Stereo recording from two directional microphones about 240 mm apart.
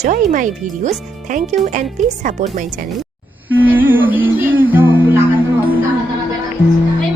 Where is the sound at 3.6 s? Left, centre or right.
Centre.